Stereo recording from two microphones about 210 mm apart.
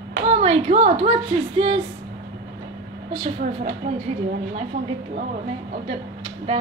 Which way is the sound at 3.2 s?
30° right (ahead or behind).